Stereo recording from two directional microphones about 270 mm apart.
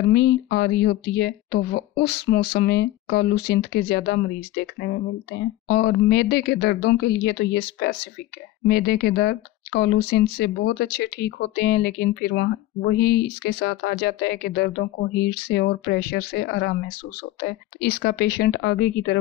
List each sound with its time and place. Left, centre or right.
0.1 s speech: left